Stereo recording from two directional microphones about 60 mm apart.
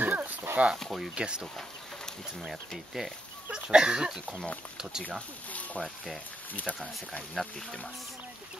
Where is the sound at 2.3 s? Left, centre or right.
Centre.